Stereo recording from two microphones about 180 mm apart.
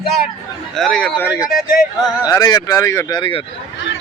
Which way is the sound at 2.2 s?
20° left (ahead or behind).